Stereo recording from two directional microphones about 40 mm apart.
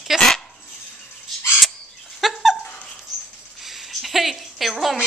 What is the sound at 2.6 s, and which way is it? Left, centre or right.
Dog, left.